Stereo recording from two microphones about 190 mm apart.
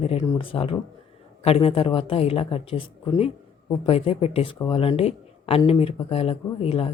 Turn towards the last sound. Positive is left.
turn(degrees=30)  # may be behind; listen again after turning